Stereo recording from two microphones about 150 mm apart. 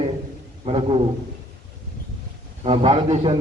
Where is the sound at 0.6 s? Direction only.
35° right (ahead or behind).